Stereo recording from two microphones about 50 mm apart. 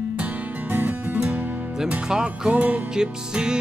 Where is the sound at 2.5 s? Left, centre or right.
Right.